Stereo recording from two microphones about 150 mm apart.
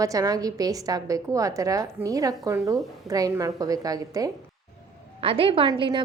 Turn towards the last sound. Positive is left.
turn(degrees=-30)  # may be behind; listen again after turning